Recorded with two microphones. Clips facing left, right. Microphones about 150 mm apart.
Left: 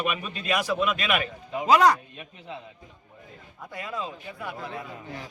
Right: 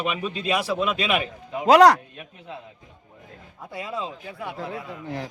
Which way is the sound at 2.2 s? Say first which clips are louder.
Right 1 dB; centre (ahead or behind).